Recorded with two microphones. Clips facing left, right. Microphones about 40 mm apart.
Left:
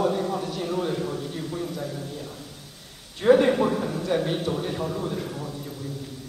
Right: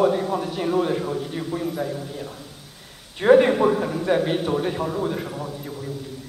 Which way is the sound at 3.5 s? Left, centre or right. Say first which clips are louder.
Right 3 dB; centre.